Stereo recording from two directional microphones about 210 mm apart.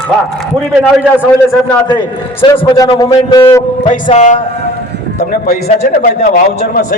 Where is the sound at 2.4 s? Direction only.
20° left (ahead or behind).